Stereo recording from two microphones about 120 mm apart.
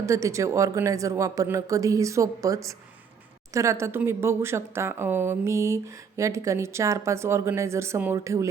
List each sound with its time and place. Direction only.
0.0 s speech: 25° right (ahead or behind)